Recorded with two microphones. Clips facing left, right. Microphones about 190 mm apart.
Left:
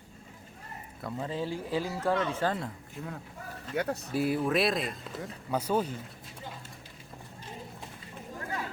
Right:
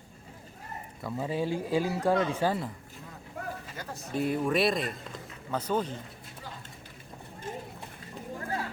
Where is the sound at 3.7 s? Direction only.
65° left (ahead or behind).